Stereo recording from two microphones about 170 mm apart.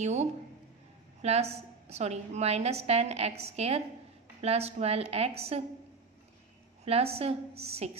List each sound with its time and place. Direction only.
0.0 s a woman's voice: 40° right (ahead or behind)
6.8 s a woman's voice: 35° right (ahead or behind)